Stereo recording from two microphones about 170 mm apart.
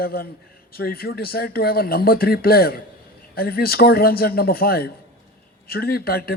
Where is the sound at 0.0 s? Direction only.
65° left (ahead or behind).